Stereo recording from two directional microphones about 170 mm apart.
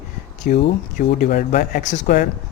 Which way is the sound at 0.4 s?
55° left (ahead or behind).